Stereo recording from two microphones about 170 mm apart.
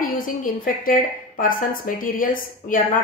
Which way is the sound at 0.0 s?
55° left (ahead or behind).